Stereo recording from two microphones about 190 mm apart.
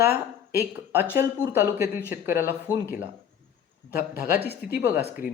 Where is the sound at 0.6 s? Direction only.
10° right (ahead or behind).